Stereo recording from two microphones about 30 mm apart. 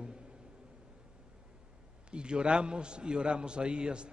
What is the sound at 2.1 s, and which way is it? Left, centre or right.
A man's voice, right.